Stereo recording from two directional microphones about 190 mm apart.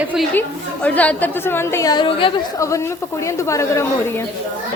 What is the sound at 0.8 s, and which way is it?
A woman's voice, 10° left (ahead or behind).